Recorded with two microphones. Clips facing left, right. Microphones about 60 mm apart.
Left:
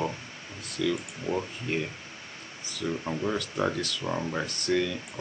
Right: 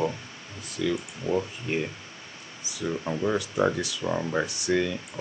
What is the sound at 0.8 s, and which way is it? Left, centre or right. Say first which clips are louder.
Speech: right 1 dB; centre.